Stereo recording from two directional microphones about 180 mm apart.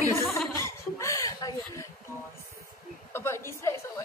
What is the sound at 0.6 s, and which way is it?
Chuckle, 15° left (ahead or behind).